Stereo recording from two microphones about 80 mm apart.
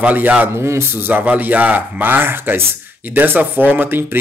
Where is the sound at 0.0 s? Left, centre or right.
Centre.